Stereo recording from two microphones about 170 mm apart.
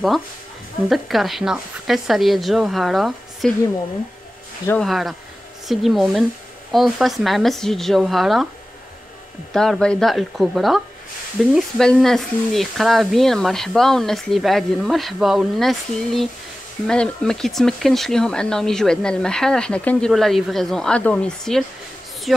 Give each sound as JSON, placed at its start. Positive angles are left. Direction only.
{"t": 0.8, "sound": "speech", "side_deg": 0}
{"t": 4.8, "sound": "speech", "side_deg": 0}
{"t": 9.5, "sound": "speech", "side_deg": 0}